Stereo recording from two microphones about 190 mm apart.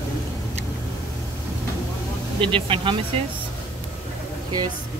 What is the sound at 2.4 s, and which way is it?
Speech, 25° right (ahead or behind).